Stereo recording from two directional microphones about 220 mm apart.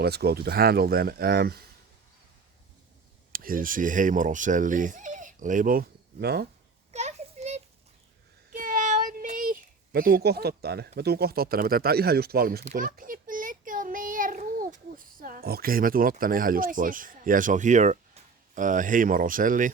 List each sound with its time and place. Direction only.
0.0 s speech: 45° right (ahead or behind)
3.3 s speech: 40° right (ahead or behind)
6.9 s a sound: 30° right (ahead or behind)
8.5 s a child's voice: 40° right (ahead or behind)